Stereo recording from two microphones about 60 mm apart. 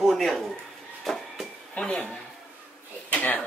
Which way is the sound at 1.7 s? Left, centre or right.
Centre.